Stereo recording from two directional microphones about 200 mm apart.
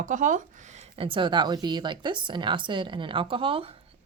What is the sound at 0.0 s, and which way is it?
A woman's voice, 40° right (ahead or behind).